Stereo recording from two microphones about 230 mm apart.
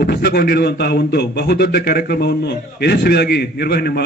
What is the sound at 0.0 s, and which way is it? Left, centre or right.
A man's voice, left.